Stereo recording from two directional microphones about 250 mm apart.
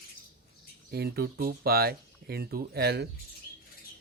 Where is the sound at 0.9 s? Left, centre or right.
Right.